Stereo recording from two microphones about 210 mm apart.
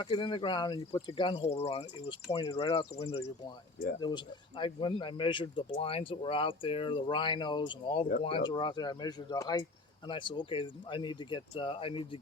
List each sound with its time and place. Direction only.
0.0 s speech: 20° left (ahead or behind)